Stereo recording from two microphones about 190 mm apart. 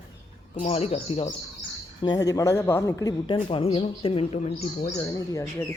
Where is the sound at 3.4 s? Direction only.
30° left (ahead or behind).